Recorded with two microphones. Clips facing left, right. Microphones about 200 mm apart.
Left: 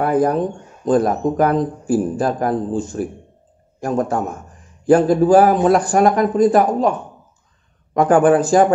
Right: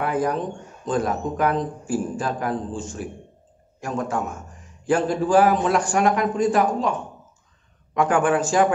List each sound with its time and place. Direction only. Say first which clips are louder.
0.0 s a man's voice: left 7 dB; 40° left (ahead or behind)